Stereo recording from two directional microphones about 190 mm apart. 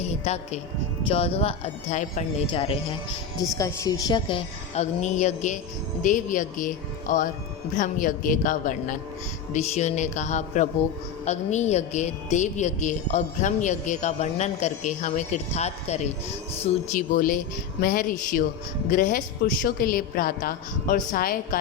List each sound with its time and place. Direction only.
0.3 s a woman's voice: 35° left (ahead or behind)
2.5 s speech: 30° left (ahead or behind)
3.6 s a woman's voice: 15° left (ahead or behind); by 16.0 s 35° left (ahead or behind)
16.9 s a woman's voice: 45° left (ahead or behind)